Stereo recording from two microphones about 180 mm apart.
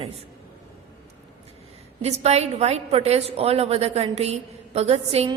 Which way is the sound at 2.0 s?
35° right (ahead or behind).